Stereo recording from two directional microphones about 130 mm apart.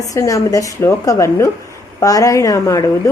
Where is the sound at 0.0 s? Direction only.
25° left (ahead or behind).